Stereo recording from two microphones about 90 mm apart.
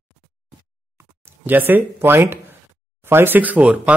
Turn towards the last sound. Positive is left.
turn(degrees=-15)  # may be behind; listen again after turning